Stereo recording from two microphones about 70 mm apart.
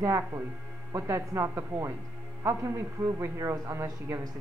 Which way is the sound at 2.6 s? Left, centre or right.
Right.